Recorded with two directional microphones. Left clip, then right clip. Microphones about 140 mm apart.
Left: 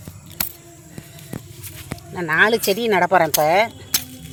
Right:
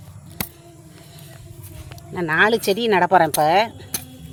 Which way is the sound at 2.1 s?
30° right (ahead or behind).